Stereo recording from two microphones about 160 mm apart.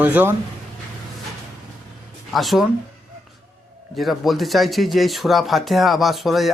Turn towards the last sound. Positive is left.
turn(degrees=0)  # may be behind; listen again after turning